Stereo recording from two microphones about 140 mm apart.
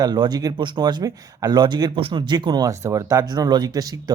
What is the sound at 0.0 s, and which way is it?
Speech, 30° right (ahead or behind).